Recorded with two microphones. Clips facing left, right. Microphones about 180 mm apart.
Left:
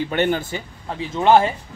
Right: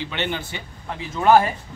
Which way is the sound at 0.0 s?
45° left (ahead or behind).